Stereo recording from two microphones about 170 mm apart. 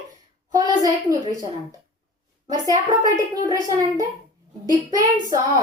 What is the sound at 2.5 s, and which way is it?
A child's voice, 20° right (ahead or behind).